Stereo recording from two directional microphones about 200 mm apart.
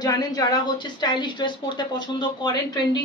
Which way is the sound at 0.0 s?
20° left (ahead or behind).